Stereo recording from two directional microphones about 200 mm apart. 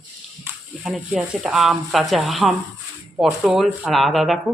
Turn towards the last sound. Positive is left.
turn(degrees=0)  # may be behind; listen again after turning